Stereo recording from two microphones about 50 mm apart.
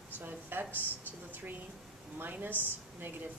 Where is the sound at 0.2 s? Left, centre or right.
Right.